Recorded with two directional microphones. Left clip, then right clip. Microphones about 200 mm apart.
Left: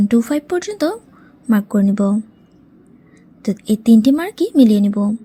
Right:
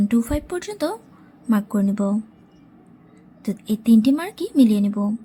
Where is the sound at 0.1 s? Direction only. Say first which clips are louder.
Left 6 dB; 20° left (ahead or behind).